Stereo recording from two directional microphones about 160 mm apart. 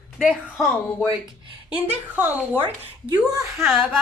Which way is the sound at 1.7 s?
10° right (ahead or behind).